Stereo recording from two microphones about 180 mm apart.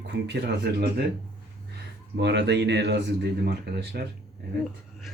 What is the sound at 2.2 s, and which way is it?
Speech, 75° right (ahead or behind).